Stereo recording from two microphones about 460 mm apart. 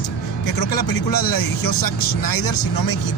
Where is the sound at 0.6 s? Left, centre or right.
Left.